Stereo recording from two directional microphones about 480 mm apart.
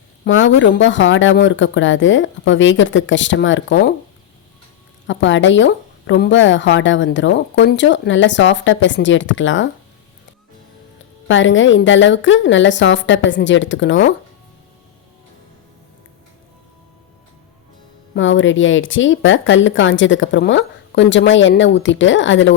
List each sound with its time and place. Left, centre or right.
0.3 s speech: left
5.0 s speech: left
11.3 s speech: left
18.1 s speech: left